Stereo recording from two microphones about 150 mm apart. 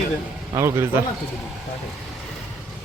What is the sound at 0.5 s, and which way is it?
Speech, 20° right (ahead or behind).